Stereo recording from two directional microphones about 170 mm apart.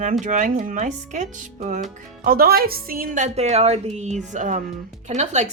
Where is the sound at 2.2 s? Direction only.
60° right (ahead or behind); by 5.5 s 45° right (ahead or behind).